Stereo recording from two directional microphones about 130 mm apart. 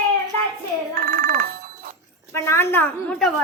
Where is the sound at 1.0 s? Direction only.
90° right.